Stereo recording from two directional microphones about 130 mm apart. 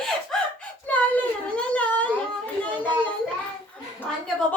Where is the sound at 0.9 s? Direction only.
10° left (ahead or behind).